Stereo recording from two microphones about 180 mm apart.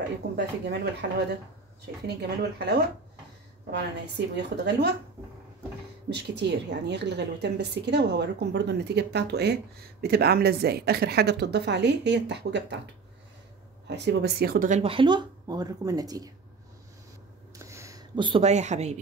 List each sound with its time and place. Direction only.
1.0 s a woman's voice: 60° right (ahead or behind)
6.0 s a woman's voice: 70° right (ahead or behind)
13.8 s speech: 70° right (ahead or behind); by 14.8 s 55° right (ahead or behind)
14.8 s speech: 30° right (ahead or behind)
17.6 s a sound: 15° right (ahead or behind); by 18.9 s 40° right (ahead or behind)